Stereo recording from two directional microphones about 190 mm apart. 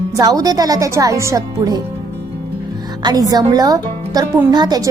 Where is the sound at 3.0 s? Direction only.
20° right (ahead or behind).